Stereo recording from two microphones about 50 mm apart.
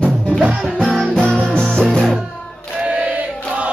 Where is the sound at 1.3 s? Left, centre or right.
Centre.